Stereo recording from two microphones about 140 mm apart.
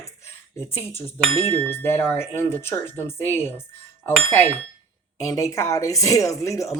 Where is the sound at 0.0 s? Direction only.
20° left (ahead or behind).